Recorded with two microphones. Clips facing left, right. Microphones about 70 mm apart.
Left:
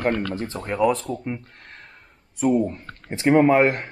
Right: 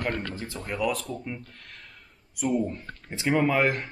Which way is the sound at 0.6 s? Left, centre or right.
Left.